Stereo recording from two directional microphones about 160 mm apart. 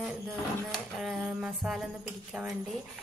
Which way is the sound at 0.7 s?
Centre (ahead or behind).